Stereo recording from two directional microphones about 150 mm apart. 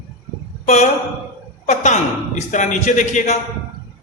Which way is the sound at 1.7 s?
50° left (ahead or behind).